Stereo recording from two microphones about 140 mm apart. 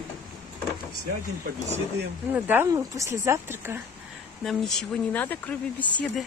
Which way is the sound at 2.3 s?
15° right (ahead or behind).